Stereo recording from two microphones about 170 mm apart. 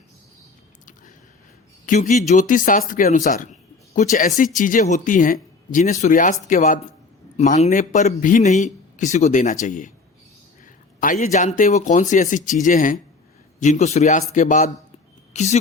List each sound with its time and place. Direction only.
1.9 s a man's voice: 45° left (ahead or behind)
11.0 s a man's voice: 45° left (ahead or behind)